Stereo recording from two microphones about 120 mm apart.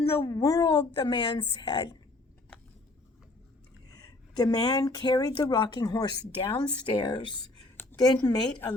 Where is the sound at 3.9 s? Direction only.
30° left (ahead or behind).